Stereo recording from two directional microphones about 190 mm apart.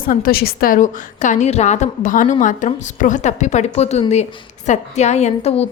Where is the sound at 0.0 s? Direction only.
45° left (ahead or behind).